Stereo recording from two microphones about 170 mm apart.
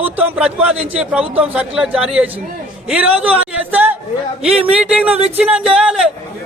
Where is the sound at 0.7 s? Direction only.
35° right (ahead or behind).